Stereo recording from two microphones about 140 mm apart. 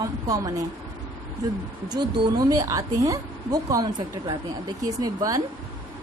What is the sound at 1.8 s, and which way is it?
A woman's voice, 30° right (ahead or behind).